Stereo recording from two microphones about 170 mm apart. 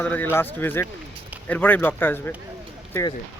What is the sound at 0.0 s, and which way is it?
Speech, 10° left (ahead or behind).